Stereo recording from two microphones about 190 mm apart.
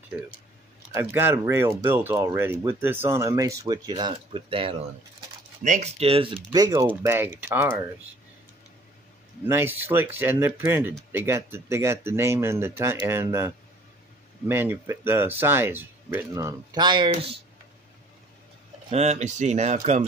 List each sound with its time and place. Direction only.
0.9 s speech: 15° right (ahead or behind)
9.5 s speech: 10° right (ahead or behind)
14.5 s speech: 10° right (ahead or behind); by 17.4 s 30° right (ahead or behind)
18.9 s speech: 35° right (ahead or behind)